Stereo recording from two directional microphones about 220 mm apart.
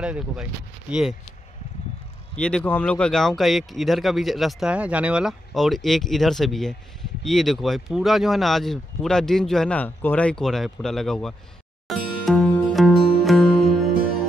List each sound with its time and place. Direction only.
0.0 s speech: 5° right (ahead or behind)
2.3 s speech: 5° left (ahead or behind)
11.9 s music: centre (ahead or behind)